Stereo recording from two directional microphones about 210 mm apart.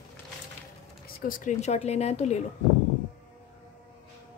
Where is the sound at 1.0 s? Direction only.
40° left (ahead or behind).